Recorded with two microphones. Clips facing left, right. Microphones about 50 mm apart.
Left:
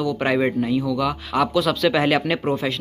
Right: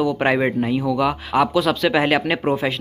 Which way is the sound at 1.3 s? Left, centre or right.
Centre.